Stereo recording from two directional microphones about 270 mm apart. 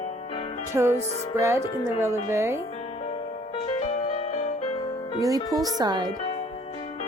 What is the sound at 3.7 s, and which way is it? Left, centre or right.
Music, left.